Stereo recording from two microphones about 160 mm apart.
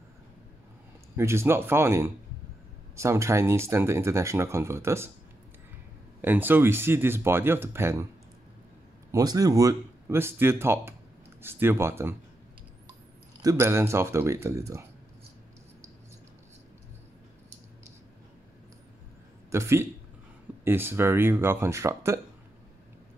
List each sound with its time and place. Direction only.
1.1 s speech: 15° right (ahead or behind)
6.2 s speech: 10° right (ahead or behind)
9.1 s speech: 25° right (ahead or behind)
13.4 s speech: 20° right (ahead or behind)
19.5 s speech: 15° right (ahead or behind)